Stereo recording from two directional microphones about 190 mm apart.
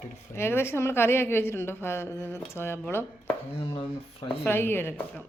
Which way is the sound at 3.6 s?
25° left (ahead or behind).